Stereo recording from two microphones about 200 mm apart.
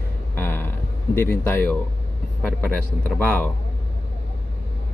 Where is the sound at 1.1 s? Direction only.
10° left (ahead or behind).